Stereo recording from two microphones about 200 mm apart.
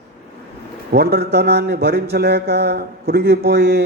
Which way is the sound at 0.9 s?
55° right (ahead or behind).